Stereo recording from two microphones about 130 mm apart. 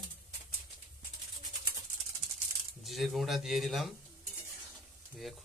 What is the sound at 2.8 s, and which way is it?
A man's voice, centre (ahead or behind).